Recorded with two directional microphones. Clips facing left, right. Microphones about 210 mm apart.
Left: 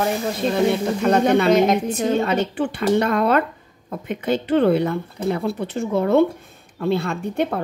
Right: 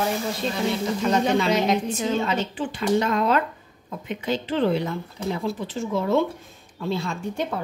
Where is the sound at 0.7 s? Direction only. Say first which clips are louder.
Left 5 dB; 60° left (ahead or behind).